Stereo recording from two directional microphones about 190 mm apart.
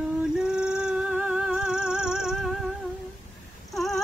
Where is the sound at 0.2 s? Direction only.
5° right (ahead or behind).